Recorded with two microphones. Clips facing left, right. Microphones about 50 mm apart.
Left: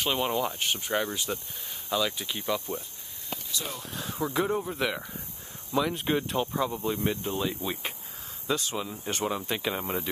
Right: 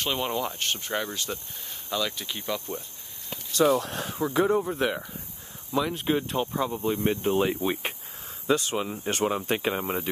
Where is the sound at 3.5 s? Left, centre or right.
Right.